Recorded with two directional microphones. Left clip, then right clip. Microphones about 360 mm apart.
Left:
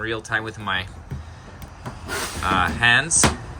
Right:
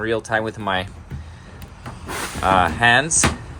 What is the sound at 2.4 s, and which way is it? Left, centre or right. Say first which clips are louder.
Speech: right 3 dB; centre.